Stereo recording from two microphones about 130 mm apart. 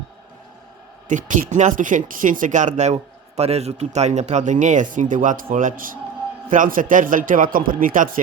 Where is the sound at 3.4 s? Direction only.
55° right (ahead or behind).